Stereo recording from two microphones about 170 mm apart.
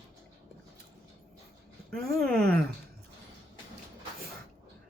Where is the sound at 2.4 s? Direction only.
65° right (ahead or behind).